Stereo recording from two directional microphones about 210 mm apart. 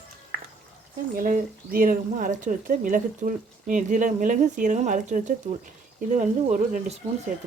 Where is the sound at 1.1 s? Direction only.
40° right (ahead or behind).